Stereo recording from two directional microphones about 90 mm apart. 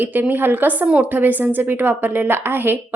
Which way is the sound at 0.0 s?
20° right (ahead or behind).